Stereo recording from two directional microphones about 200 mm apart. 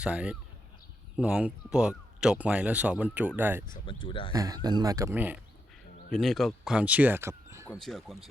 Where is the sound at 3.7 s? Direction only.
25° left (ahead or behind).